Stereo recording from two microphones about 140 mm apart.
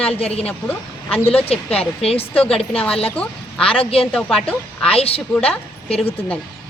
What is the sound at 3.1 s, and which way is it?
Speech, 10° left (ahead or behind).